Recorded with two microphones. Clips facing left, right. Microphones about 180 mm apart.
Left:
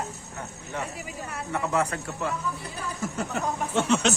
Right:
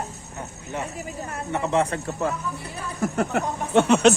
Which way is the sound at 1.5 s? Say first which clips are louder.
Right 4 dB; 25° right (ahead or behind).